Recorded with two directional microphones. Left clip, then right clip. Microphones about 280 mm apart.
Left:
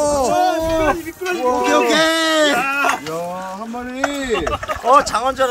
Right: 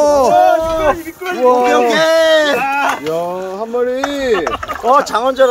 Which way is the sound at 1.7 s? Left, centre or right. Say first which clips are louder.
Right 3 dB; centre.